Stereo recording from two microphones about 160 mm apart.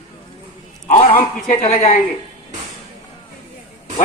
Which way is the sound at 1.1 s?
60° left (ahead or behind).